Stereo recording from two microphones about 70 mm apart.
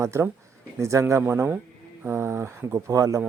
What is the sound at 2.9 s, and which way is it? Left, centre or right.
Speech, right.